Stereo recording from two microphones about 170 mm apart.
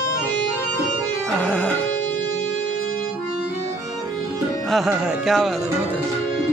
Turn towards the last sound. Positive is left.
turn(degrees=0)  # may be behind; listen again after turning